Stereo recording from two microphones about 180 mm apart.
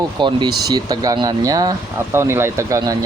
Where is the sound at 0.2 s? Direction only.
25° right (ahead or behind).